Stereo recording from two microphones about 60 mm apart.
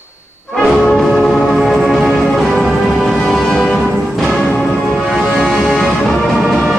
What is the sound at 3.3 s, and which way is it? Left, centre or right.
Music, centre.